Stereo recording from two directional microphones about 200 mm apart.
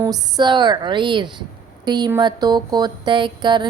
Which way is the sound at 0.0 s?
20° right (ahead or behind).